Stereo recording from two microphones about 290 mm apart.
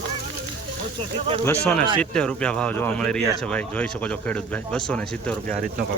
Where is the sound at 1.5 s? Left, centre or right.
Centre.